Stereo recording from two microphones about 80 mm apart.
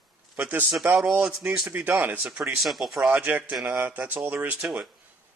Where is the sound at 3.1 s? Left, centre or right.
Right.